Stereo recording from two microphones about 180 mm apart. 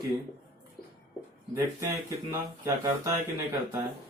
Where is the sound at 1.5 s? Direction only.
15° right (ahead or behind).